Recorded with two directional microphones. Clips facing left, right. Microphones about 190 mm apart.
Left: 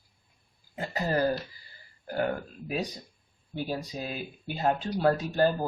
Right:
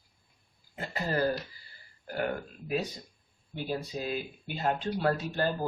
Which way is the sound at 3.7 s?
40° left (ahead or behind).